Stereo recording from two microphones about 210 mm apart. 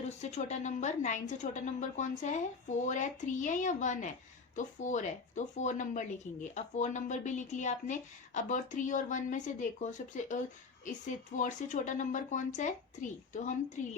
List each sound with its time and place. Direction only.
0.2 s speech: 30° left (ahead or behind)